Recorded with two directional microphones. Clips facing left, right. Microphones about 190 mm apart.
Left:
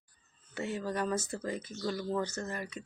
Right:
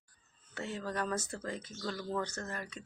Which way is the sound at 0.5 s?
10° left (ahead or behind).